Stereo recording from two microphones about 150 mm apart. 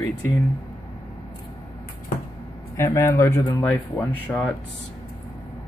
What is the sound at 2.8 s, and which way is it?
Speech, 20° left (ahead or behind).